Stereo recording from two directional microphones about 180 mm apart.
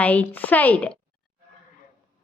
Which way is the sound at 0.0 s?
10° left (ahead or behind).